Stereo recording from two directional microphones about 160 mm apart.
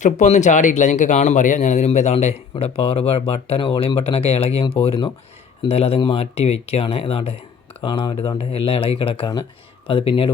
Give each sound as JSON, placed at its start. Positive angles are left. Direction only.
{"t": 0.0, "sound": "speech", "side_deg": 50}